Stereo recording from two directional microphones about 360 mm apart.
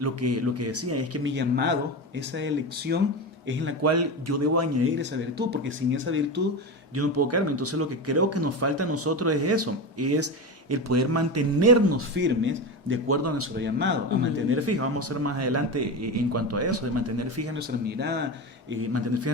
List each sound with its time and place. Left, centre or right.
0.0 s speech: right
3.8 s a man's voice: right
4.9 s speech: right
12.1 s speech: right
13.7 s speech: right
14.5 s speech: right
17.6 s speech: right
18.7 s speech: right